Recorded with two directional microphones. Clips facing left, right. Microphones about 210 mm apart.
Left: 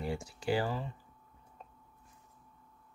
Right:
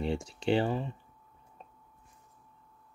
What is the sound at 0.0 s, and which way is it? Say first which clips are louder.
Speech: right 4 dB; 25° right (ahead or behind).